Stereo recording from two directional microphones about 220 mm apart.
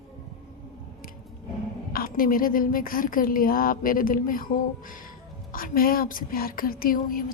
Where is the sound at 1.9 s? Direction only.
40° left (ahead or behind).